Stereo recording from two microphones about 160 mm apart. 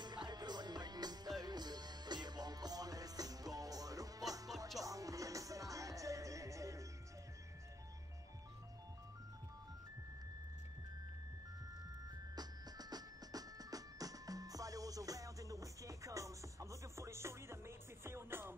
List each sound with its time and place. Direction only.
0.0 s music: 25° right (ahead or behind)
12.4 s music: 25° right (ahead or behind)